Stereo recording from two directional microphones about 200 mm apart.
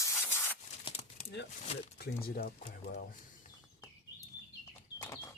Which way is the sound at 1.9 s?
50° left (ahead or behind).